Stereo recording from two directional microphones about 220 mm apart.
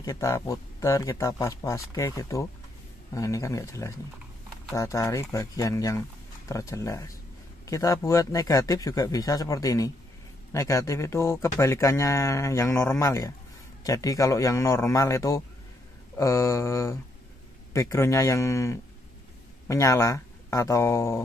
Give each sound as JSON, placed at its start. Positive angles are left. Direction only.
{"t": 0.0, "sound": "speech", "side_deg": 15}